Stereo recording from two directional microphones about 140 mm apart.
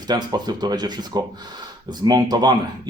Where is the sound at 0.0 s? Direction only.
30° right (ahead or behind).